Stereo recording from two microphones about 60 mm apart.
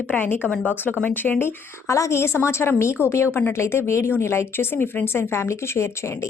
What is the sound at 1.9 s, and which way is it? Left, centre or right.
Speech, left.